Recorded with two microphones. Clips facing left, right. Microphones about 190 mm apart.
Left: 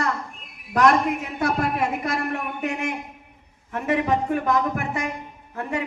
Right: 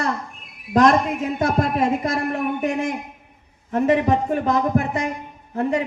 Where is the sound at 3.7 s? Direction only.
20° right (ahead or behind).